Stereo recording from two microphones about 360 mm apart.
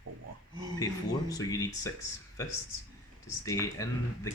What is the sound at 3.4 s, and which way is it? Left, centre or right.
Speech, centre.